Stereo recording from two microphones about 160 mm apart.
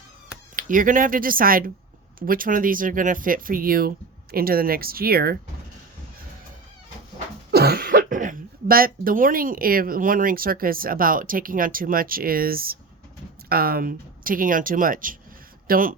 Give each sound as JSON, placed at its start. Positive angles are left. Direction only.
{"t": 0.5, "sound": "speech", "side_deg": -55}
{"t": 7.5, "sound": "speech", "side_deg": -75}